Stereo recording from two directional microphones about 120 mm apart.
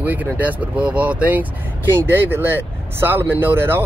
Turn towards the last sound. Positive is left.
turn(degrees=-20)  # may be behind; listen again after turning